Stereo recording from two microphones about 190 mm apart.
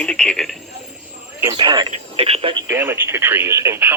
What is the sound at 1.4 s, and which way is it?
Speech, 20° right (ahead or behind).